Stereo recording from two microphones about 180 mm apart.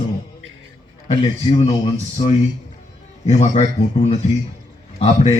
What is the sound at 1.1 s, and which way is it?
Speech, 35° left (ahead or behind).